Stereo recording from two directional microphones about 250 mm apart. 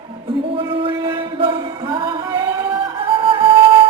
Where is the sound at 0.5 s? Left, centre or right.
Right.